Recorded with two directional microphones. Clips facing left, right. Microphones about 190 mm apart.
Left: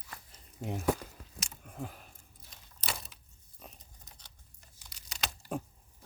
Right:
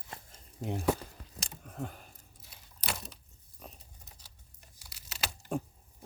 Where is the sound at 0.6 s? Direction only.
40° right (ahead or behind).